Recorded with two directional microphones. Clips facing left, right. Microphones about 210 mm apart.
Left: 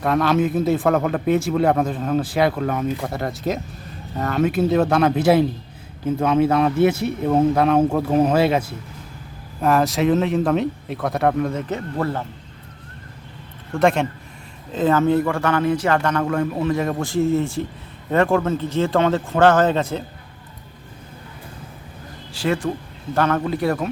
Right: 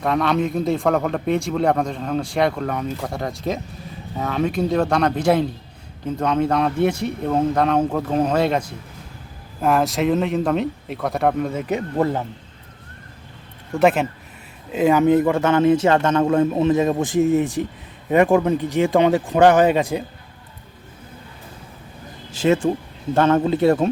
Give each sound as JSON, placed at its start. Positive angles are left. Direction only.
{"t": 0.0, "sound": "speech", "side_deg": 0}
{"t": 11.7, "sound": "speech", "side_deg": -15}
{"t": 13.7, "sound": "speech", "side_deg": -5}
{"t": 22.3, "sound": "speech", "side_deg": -20}